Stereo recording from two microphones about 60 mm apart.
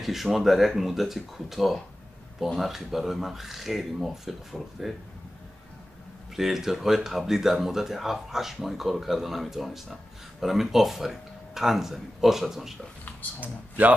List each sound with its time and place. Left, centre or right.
0.0 s speech: centre
6.3 s speech: centre
13.4 s speech: right